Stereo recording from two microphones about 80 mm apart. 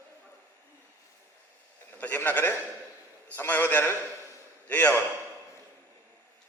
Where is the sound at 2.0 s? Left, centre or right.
Left.